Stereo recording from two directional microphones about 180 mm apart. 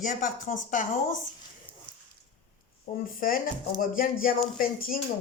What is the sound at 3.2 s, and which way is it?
A woman's voice, 50° left (ahead or behind).